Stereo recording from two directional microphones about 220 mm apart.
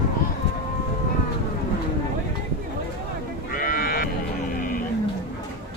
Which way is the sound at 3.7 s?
40° left (ahead or behind).